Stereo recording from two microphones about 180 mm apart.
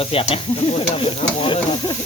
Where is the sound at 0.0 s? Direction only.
30° left (ahead or behind).